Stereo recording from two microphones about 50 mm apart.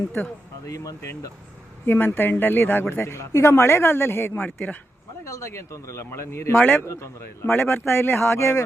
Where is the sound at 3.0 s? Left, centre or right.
Left.